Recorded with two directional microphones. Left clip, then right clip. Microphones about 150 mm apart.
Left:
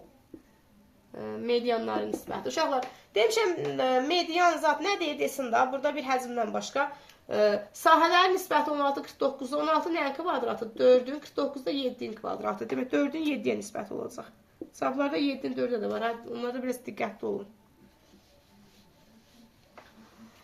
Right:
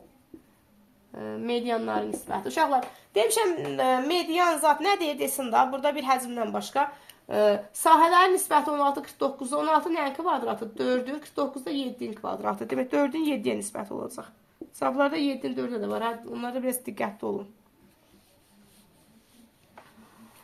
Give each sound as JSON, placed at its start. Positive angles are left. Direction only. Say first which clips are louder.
{"t": 1.1, "sound": "speech", "louder": "left 1 dB", "side_deg": -40}
{"t": 2.6, "sound": "a woman's voice", "louder": "right 4 dB", "side_deg": -65}